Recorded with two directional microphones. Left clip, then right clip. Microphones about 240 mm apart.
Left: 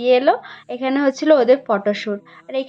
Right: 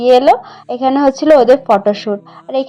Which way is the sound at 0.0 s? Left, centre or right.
Centre.